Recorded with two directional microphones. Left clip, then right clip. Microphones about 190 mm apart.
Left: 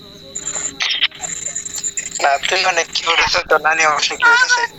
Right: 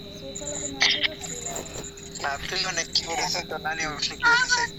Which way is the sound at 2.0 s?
50° left (ahead or behind).